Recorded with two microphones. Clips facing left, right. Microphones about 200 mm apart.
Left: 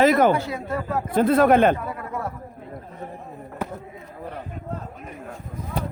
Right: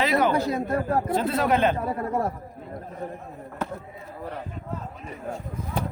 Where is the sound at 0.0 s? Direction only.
45° left (ahead or behind).